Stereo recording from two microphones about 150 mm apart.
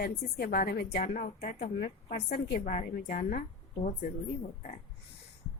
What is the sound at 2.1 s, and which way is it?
A woman's voice, 75° left (ahead or behind).